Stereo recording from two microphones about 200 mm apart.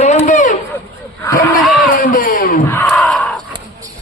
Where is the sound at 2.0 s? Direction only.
45° left (ahead or behind).